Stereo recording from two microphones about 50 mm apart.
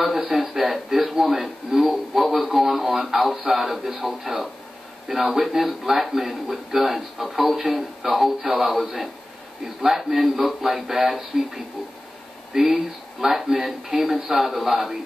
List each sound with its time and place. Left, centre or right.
0.3 s a man's voice: centre